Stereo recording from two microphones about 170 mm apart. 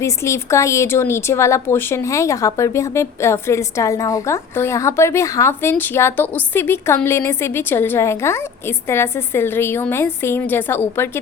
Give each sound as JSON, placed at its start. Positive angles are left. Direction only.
{"t": 0.0, "sound": "a woman's voice", "side_deg": 15}